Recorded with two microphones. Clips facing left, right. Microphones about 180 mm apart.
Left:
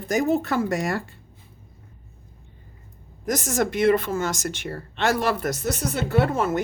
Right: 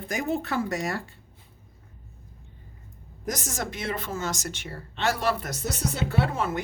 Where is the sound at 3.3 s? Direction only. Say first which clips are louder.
Left 8 dB; 60° left (ahead or behind).